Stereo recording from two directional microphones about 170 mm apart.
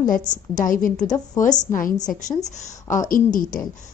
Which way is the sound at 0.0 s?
50° left (ahead or behind).